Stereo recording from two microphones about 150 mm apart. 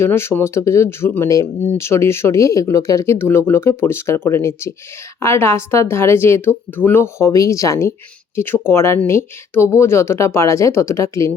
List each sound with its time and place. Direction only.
0.0 s speech: 15° left (ahead or behind)